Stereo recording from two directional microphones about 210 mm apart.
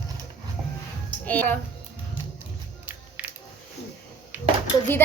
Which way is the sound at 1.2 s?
5° left (ahead or behind).